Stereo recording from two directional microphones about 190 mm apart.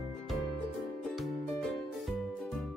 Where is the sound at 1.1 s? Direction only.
Centre (ahead or behind).